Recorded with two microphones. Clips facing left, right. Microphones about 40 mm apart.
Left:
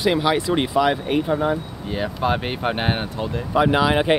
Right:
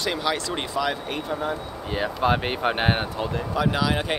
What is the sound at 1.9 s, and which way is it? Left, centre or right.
Speech, centre.